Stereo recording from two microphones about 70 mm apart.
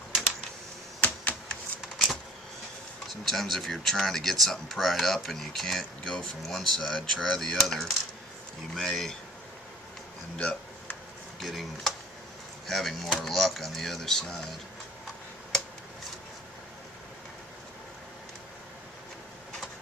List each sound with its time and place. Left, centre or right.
1.0 s computer keyboard: centre
3.1 s speech: centre
10.3 s a sound: centre
11.3 s speech: centre